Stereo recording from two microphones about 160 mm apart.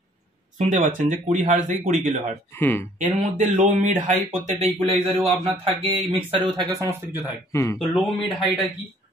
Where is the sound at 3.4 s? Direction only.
50° right (ahead or behind).